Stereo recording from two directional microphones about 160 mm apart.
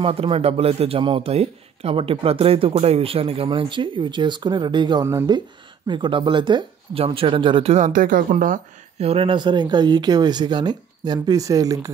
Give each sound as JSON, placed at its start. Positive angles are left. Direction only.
{"t": 0.0, "sound": "a man's voice", "side_deg": -35}
{"t": 9.0, "sound": "speech", "side_deg": -35}